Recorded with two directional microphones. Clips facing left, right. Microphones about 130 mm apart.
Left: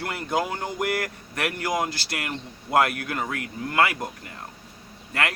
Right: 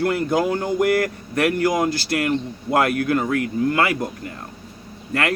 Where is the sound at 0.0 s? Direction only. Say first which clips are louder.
Right 7 dB; 45° right (ahead or behind).